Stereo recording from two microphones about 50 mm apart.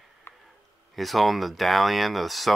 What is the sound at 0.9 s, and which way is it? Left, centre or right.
Speech, centre.